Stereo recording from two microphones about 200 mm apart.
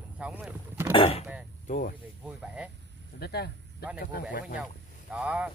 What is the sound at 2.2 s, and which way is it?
Speech, 5° right (ahead or behind).